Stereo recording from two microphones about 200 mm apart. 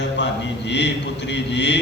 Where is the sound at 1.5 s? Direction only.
60° left (ahead or behind).